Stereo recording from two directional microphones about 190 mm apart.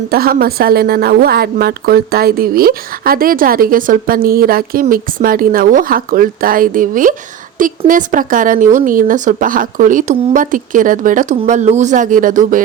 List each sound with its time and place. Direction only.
0.1 s a woman's voice: 50° right (ahead or behind)